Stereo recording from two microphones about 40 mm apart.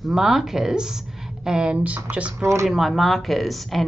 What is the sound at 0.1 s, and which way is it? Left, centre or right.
A woman's voice, centre.